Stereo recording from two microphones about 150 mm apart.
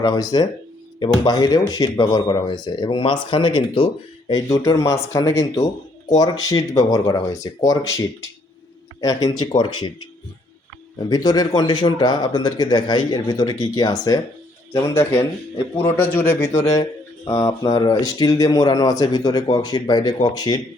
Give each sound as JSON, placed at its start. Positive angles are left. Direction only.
{"t": 0.0, "sound": "speech", "side_deg": 25}
{"t": 10.9, "sound": "a man's voice", "side_deg": 30}